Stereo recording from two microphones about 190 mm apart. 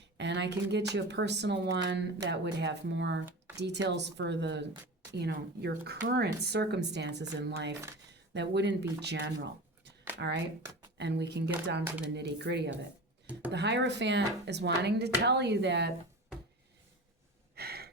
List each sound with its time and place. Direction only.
0.2 s speech: 65° right (ahead or behind)
7.7 s speech: 15° right (ahead or behind)
8.3 s speech: 65° right (ahead or behind)
17.5 s gasp: 55° right (ahead or behind)